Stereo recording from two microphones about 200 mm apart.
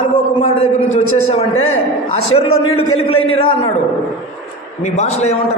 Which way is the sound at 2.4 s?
90° left.